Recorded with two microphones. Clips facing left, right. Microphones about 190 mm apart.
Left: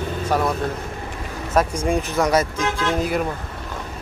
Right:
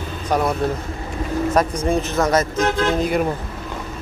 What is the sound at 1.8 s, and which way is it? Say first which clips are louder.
Speech: right 1 dB; 10° left (ahead or behind).